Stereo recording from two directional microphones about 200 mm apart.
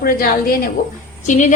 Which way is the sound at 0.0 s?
45° left (ahead or behind).